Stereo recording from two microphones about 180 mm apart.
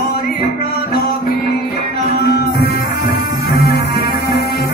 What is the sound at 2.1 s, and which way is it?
Music, 60° left (ahead or behind).